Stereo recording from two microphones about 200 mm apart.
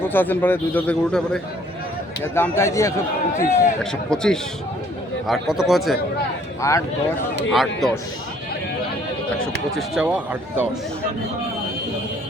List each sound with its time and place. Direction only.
0.0 s a man's voice: 10° left (ahead or behind)
4.1 s speech: 5° left (ahead or behind)
6.6 s a man's voice: 15° left (ahead or behind)
7.5 s speech: centre (ahead or behind)
9.7 s speech: 5° right (ahead or behind)